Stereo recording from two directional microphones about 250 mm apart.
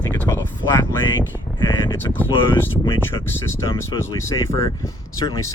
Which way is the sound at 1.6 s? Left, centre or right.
Centre.